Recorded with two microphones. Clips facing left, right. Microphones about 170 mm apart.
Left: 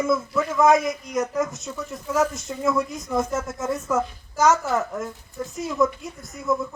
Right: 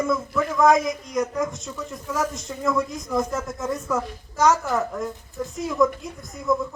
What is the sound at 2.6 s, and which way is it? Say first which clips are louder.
A woman's voice: even; 5° left (ahead or behind).